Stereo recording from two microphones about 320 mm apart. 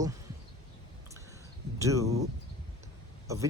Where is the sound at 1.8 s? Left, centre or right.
Centre.